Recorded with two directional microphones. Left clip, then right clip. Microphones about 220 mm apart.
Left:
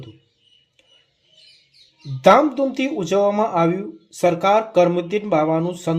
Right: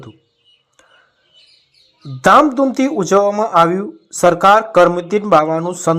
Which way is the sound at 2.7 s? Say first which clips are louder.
Right 6 dB; 15° right (ahead or behind).